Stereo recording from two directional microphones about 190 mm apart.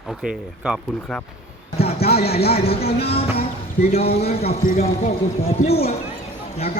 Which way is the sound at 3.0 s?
30° left (ahead or behind).